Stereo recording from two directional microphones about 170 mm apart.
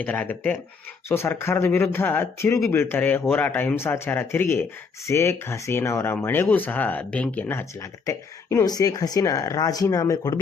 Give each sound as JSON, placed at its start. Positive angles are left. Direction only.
{"t": 0.0, "sound": "speech", "side_deg": 10}